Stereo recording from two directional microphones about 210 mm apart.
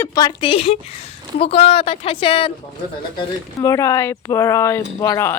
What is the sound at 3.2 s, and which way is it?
Speech, 15° left (ahead or behind).